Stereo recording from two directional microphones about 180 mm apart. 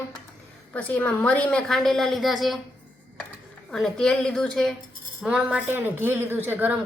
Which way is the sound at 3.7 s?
5° left (ahead or behind).